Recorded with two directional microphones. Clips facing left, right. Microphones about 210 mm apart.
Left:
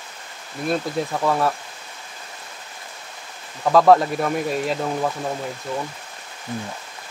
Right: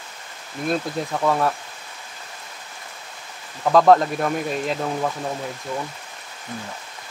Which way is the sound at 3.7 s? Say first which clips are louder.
Even; centre (ahead or behind).